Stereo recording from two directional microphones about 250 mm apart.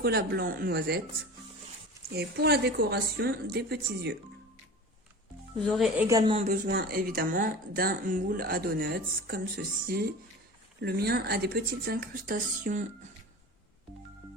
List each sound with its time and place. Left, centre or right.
0.0 s speech: right
2.0 s speech: right
5.6 s speech: centre
6.1 s speech: centre